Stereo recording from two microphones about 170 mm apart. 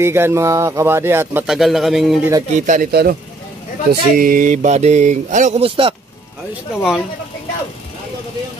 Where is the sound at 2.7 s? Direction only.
60° right (ahead or behind); by 5.9 s 35° right (ahead or behind).